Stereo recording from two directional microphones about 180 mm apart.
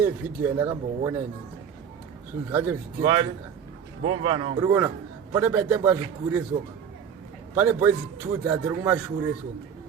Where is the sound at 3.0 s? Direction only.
25° right (ahead or behind).